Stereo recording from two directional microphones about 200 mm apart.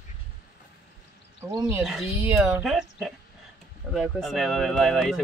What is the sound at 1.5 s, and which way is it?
Speech, 15° right (ahead or behind).